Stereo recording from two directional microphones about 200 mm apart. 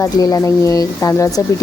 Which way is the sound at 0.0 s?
15° left (ahead or behind).